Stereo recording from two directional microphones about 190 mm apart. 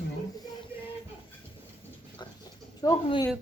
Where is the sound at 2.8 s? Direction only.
20° left (ahead or behind).